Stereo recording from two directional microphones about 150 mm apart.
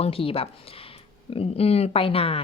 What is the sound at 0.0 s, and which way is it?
Speech, 40° left (ahead or behind).